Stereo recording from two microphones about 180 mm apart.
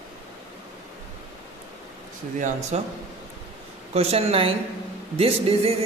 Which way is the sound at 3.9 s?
35° right (ahead or behind).